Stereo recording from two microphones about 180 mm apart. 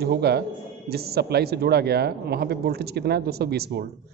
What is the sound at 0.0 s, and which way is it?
Speech, 65° right (ahead or behind).